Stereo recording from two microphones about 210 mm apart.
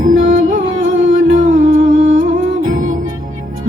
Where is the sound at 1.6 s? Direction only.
65° right (ahead or behind).